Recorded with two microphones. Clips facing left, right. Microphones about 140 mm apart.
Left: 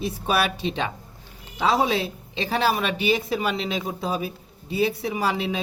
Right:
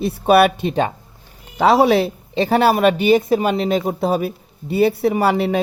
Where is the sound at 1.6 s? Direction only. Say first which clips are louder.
Right 8 dB; 65° right (ahead or behind).